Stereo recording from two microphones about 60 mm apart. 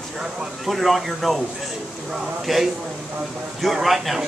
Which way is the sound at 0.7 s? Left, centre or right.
Centre.